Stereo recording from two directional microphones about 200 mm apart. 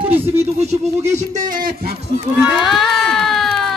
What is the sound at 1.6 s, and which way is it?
Speech, 50° right (ahead or behind).